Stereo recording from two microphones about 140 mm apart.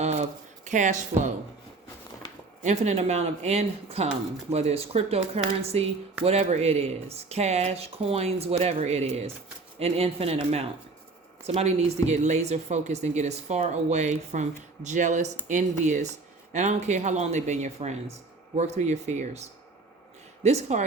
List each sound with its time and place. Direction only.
0.0 s a sound: 55° right (ahead or behind)
2.6 s speech: 55° right (ahead or behind)
20.4 s speech: 50° right (ahead or behind)